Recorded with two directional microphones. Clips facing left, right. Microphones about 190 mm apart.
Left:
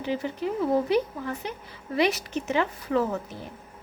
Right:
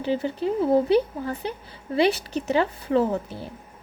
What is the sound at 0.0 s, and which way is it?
A woman's voice, 30° right (ahead or behind).